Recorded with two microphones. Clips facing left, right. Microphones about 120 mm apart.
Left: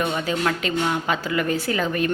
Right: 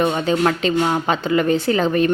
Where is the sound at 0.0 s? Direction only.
35° right (ahead or behind).